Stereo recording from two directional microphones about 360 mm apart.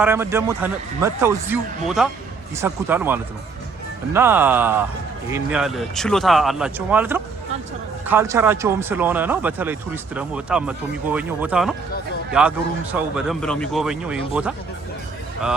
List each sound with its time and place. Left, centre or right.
0.0 s speech: centre